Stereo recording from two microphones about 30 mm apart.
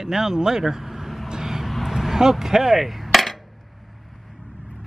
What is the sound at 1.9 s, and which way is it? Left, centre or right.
Speech, centre.